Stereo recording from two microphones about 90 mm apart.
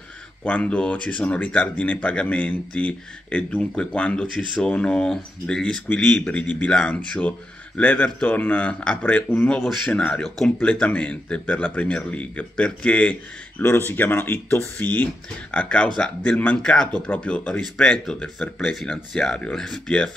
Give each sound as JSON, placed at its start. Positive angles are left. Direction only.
{"t": 0.4, "sound": "speech", "side_deg": 15}
{"t": 9.8, "sound": "speech", "side_deg": 10}
{"t": 10.6, "sound": "speech", "side_deg": 15}